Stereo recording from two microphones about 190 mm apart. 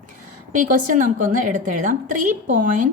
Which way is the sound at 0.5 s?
45° right (ahead or behind).